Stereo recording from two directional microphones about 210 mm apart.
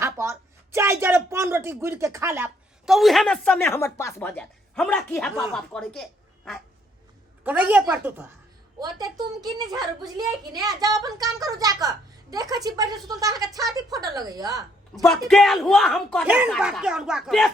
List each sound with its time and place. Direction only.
0.0 s speech: 10° right (ahead or behind)
2.8 s a woman's voice: centre (ahead or behind)
8.8 s a woman's voice: 20° right (ahead or behind)
14.9 s speech: centre (ahead or behind)